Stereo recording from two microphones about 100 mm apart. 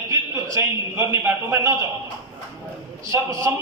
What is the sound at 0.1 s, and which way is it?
A man's voice, 30° right (ahead or behind).